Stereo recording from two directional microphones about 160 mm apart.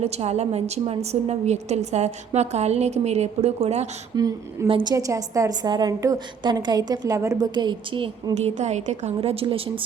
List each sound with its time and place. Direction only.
0.0 s a woman's voice: 40° right (ahead or behind)
4.1 s a woman's voice: 25° right (ahead or behind)